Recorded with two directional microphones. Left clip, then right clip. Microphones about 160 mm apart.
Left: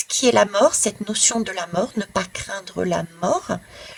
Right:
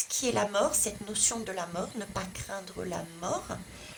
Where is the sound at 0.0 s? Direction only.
50° left (ahead or behind).